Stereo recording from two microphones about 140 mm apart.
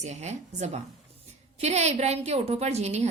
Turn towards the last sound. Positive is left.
turn(degrees=-50)  # may be behind; listen again after turning